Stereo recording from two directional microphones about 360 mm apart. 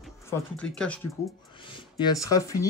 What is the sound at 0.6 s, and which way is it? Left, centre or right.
Speech, centre.